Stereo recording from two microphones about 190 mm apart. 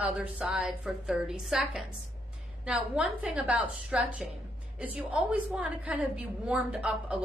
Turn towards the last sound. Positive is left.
turn(degrees=-5)  # may be behind; listen again after turning